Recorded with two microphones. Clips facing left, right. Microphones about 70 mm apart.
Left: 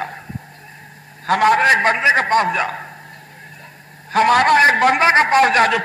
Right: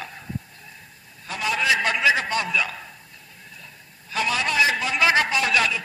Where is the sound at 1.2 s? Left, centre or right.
Left.